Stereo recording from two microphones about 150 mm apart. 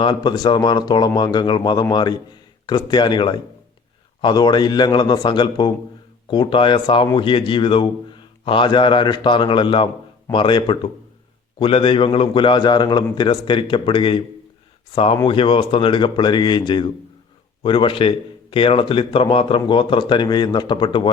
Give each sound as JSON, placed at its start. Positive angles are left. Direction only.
{"t": 0.0, "sound": "a man's voice", "side_deg": 30}